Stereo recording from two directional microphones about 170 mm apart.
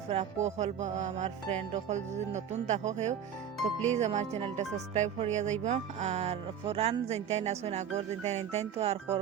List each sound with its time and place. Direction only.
0.1 s music: 40° right (ahead or behind)
3.9 s speech: 40° right (ahead or behind)